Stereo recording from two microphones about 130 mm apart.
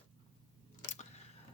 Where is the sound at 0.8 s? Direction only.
65° left (ahead or behind).